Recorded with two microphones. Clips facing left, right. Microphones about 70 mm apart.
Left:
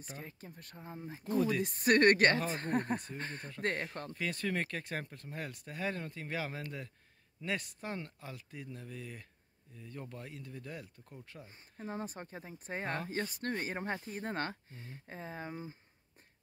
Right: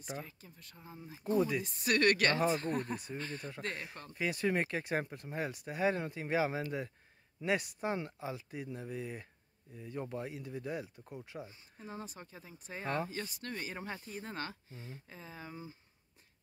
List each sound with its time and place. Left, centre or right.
0.2 s speech: left
1.3 s speech: centre
1.6 s speech: left
1.9 s speech: left
4.1 s speech: centre
11.8 s speech: left